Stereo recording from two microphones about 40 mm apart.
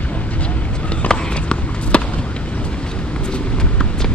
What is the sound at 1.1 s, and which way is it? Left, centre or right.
Run, left.